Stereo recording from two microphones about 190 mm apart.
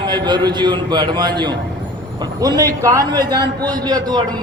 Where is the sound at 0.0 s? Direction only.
25° right (ahead or behind).